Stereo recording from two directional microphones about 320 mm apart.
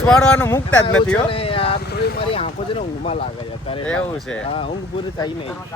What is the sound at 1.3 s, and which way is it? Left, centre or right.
Vehicle, centre.